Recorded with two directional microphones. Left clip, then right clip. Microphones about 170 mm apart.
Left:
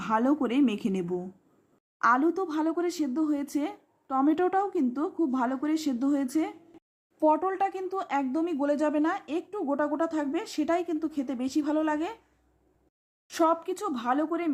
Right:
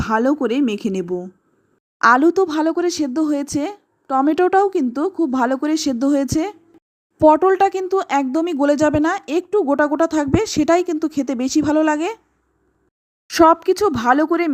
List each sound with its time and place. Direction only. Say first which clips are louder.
0.0 s a woman's voice: right 8 dB; 30° right (ahead or behind)
2.0 s speech: right 11 dB; 45° right (ahead or behind)
13.2 s speech: right 13 dB; 35° right (ahead or behind)